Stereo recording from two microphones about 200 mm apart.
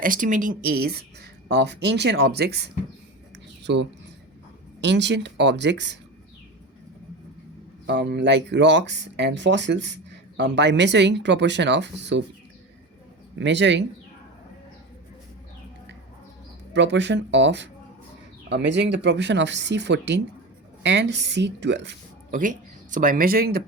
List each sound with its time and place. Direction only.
0.0 s speech: 40° right (ahead or behind)
3.3 s a sound: 60° right (ahead or behind)
4.8 s speech: 60° right (ahead or behind)
7.9 s speech: 60° right (ahead or behind)
13.4 s speech: 60° right (ahead or behind)
16.7 s speech: 60° right (ahead or behind)
22.3 s speech: 40° right (ahead or behind)